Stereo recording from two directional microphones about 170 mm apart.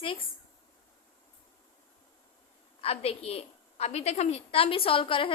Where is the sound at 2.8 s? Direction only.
35° left (ahead or behind).